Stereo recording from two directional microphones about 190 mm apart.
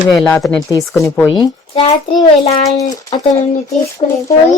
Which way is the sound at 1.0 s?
20° left (ahead or behind).